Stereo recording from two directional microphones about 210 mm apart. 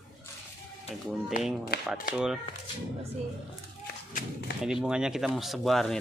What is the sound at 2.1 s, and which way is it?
Speech, 5° right (ahead or behind).